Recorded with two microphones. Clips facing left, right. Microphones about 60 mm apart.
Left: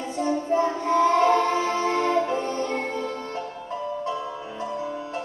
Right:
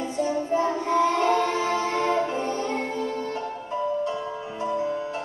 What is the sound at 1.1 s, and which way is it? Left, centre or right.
Singing, left.